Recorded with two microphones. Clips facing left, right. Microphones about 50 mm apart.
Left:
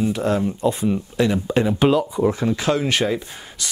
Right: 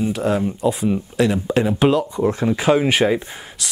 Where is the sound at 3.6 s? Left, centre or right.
Centre.